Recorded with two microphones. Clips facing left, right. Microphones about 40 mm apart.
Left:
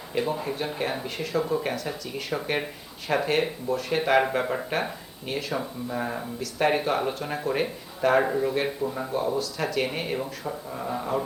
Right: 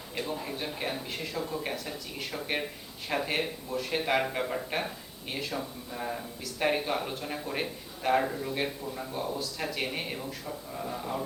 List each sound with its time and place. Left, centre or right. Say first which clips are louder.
0.1 s speech: left 7 dB; centre
1.0 s speech: left 7 dB; centre
3.1 s speech: left 6 dB; centre
5.3 s speech: left 5 dB; centre
5.5 s speech: left 7 dB; left
7.5 s speech: left 6 dB; centre
8.2 s speech: left 7 dB; left
8.8 s speech: left 8 dB; centre
10.2 s speech: left 6 dB; left